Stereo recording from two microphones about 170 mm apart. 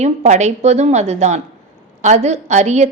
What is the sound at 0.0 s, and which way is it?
A woman's voice, 45° right (ahead or behind).